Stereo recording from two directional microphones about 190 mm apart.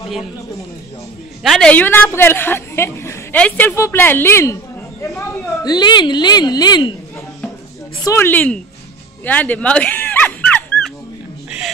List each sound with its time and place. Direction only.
1.4 s a woman's voice: centre (ahead or behind); by 7.0 s 25° left (ahead or behind)
8.0 s a woman's voice: 15° left (ahead or behind)
9.2 s dog: 10° left (ahead or behind)